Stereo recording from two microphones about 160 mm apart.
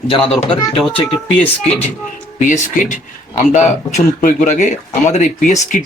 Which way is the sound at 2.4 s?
50° left (ahead or behind).